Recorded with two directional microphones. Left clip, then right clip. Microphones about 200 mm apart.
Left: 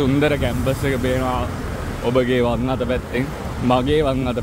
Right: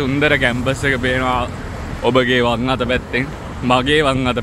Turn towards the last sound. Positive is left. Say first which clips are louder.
# right 4 dB
turn(degrees=0)  # may be behind; listen again after turning